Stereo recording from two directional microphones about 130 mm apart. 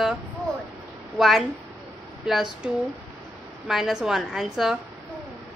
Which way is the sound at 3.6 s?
5° right (ahead or behind).